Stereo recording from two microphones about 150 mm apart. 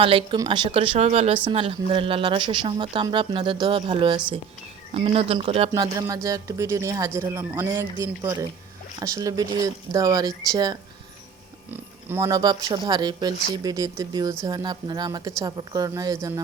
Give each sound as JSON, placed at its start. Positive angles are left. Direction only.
{"t": 0.0, "sound": "speech", "side_deg": -35}
{"t": 5.7, "sound": "speech", "side_deg": -25}
{"t": 11.7, "sound": "speech", "side_deg": -15}